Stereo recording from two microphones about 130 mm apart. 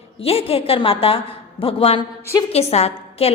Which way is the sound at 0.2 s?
50° left (ahead or behind).